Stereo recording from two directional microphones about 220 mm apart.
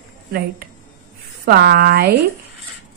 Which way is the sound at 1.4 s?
45° right (ahead or behind).